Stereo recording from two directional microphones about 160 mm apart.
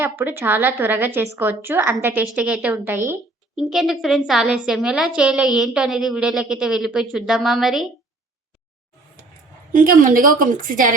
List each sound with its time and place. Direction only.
0.0 s a woman's voice: 15° right (ahead or behind)
3.7 s a woman's voice: centre (ahead or behind)
9.7 s a woman's voice: 60° right (ahead or behind)